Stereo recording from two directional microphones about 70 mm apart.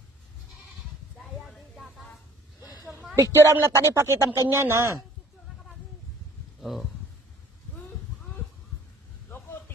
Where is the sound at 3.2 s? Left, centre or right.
Right.